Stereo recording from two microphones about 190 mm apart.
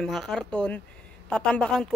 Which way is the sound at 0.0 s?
Centre (ahead or behind).